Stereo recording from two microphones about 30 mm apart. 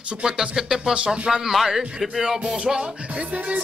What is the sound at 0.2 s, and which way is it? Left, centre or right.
Speech, right.